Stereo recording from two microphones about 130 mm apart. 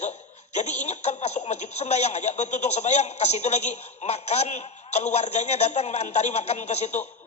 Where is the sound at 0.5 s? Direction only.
60° left (ahead or behind).